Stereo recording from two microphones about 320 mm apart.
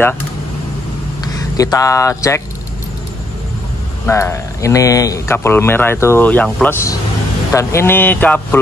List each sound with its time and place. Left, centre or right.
1.2 s speech: centre
4.0 s speech: centre